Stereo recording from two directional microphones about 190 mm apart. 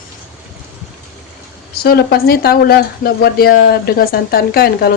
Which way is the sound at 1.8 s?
55° left (ahead or behind).